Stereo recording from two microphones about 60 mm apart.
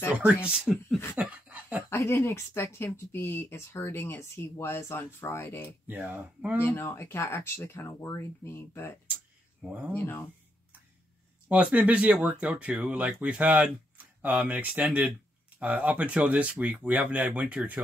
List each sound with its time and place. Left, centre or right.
0.1 s speech: right
1.1 s a sound: right
1.9 s speech: left
5.9 s speech: right
6.6 s speech: left
8.5 s speech: left
9.7 s speech: right
9.9 s speech: left
11.4 s speech: right